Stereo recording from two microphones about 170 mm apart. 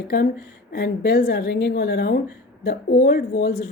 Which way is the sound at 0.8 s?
70° left (ahead or behind).